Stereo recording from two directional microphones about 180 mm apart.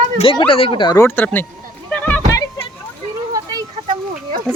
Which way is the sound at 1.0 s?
10° left (ahead or behind).